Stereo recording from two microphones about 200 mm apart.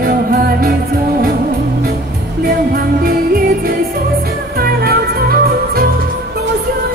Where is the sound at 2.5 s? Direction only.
50° right (ahead or behind).